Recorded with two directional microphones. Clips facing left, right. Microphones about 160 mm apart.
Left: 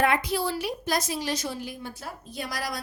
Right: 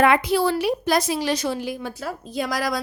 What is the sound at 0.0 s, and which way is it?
A woman's voice, 70° right (ahead or behind).